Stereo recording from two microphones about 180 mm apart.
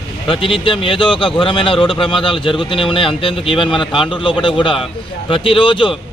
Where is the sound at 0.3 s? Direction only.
30° left (ahead or behind).